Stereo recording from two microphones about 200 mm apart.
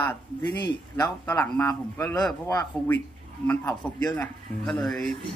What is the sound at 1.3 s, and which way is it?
A man's voice, 10° left (ahead or behind).